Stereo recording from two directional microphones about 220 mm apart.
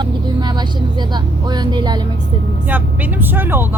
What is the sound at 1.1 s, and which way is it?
Speech, 20° right (ahead or behind).